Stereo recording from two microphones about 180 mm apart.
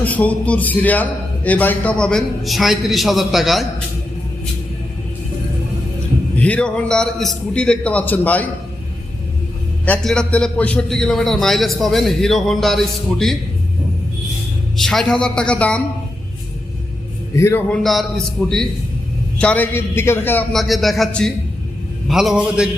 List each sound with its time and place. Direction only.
0.0 s a man's voice: 10° left (ahead or behind)
6.4 s a man's voice: 5° left (ahead or behind)
9.8 s a man's voice: 5° left (ahead or behind)
14.8 s a man's voice: centre (ahead or behind)
17.3 s a man's voice: 15° left (ahead or behind)
17.7 s a man's voice: centre (ahead or behind)